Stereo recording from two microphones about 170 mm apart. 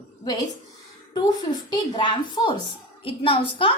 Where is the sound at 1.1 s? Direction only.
25° left (ahead or behind).